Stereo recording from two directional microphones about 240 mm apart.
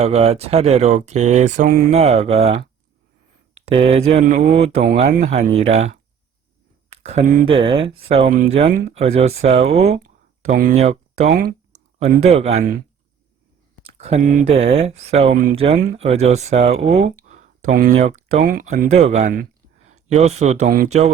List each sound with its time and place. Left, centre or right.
0.0 s speech: right
3.7 s speech: right
7.0 s speech: right
13.8 s speech: right